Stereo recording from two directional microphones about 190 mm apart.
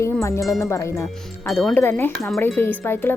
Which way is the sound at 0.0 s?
15° left (ahead or behind).